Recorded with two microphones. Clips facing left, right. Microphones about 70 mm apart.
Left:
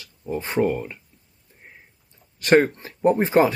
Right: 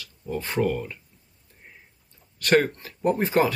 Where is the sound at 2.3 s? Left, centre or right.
Centre.